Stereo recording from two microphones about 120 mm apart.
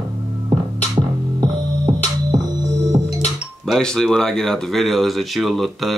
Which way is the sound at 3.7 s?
5° left (ahead or behind).